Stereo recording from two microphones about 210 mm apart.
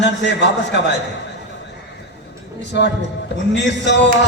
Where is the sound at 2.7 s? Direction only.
55° left (ahead or behind).